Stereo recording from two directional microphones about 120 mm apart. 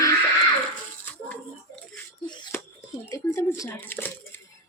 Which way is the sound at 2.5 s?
20° left (ahead or behind).